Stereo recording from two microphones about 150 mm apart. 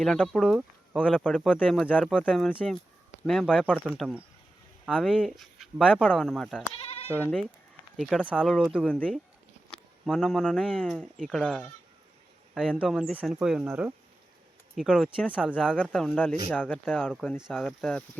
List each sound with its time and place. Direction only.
0.0 s speech: 5° left (ahead or behind)
6.8 s bleat: 40° left (ahead or behind)
7.1 s speech: 10° left (ahead or behind)
8.6 s speech: centre (ahead or behind)
8.9 s speech: 10° left (ahead or behind)
13.7 s speech: 15° right (ahead or behind)
14.8 s speech: centre (ahead or behind)
15.6 s speech: 10° left (ahead or behind)
17.1 s speech: 5° right (ahead or behind)